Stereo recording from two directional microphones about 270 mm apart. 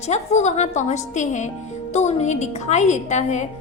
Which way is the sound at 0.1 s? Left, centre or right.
Left.